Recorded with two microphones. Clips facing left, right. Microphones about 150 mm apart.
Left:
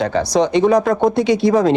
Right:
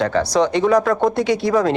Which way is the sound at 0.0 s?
20° left (ahead or behind).